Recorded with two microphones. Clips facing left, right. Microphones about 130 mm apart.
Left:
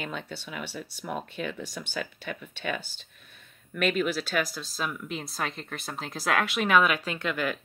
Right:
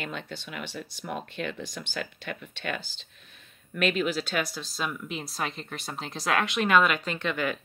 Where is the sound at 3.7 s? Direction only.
Centre (ahead or behind).